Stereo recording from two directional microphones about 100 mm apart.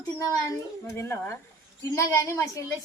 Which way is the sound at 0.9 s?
25° left (ahead or behind).